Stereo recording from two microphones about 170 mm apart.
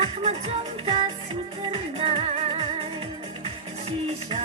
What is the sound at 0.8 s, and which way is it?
Music, 35° right (ahead or behind).